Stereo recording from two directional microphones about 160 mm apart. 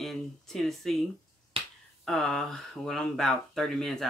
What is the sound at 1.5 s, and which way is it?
Finger snapping, 35° right (ahead or behind).